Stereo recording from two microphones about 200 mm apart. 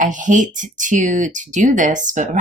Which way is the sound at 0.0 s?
40° right (ahead or behind).